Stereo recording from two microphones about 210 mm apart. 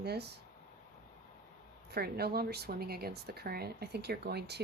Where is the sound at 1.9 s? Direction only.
50° right (ahead or behind).